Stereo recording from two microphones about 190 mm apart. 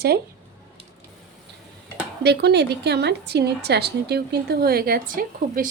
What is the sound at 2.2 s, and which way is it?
A woman's voice, 60° right (ahead or behind).